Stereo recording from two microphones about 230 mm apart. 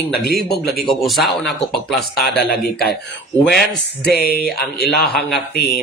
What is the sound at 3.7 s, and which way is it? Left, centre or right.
Speech, left.